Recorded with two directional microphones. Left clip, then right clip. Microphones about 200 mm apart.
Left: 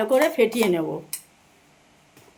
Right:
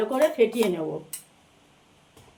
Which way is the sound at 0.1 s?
45° left (ahead or behind).